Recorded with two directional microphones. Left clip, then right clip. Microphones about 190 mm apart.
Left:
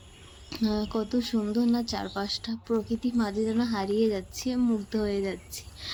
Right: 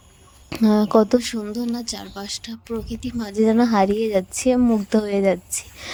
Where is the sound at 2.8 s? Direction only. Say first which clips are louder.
Even; 55° right (ahead or behind).